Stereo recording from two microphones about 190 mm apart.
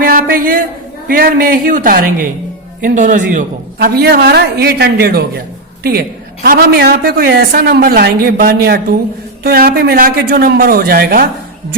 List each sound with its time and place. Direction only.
0.0 s a sound: 50° right (ahead or behind)
1.0 s a man's voice: 50° right (ahead or behind)
6.4 s a man's voice: 55° right (ahead or behind)